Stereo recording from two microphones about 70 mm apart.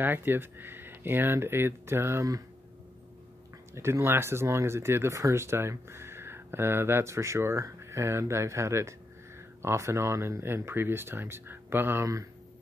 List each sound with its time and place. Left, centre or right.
0.0 s speech: right
3.7 s speech: right